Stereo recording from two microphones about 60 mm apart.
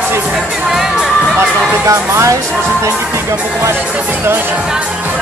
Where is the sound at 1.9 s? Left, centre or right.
Right.